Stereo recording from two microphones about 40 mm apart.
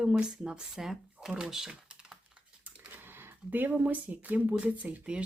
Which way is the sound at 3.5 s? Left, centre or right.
Right.